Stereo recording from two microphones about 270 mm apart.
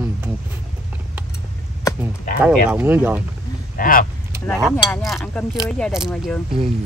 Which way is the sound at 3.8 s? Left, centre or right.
Left.